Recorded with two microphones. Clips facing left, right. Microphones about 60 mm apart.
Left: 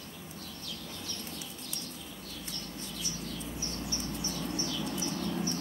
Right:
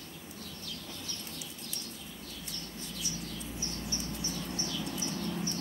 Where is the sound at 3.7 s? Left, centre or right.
Centre.